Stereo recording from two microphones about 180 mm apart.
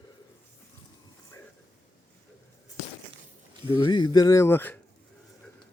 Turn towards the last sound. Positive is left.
turn(degrees=10)  # may be behind; listen again after turning